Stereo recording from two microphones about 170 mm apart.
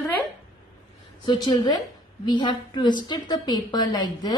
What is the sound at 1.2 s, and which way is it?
A woman's voice, 30° left (ahead or behind).